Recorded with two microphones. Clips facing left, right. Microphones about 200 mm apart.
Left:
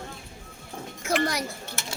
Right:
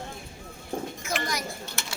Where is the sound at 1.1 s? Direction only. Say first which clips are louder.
Left 7 dB; 65° left (ahead or behind).